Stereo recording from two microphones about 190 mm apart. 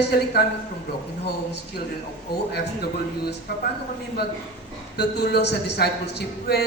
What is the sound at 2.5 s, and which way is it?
Speech, 60° left (ahead or behind).